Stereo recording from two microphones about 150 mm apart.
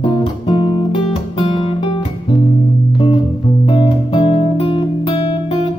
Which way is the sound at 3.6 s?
35° left (ahead or behind).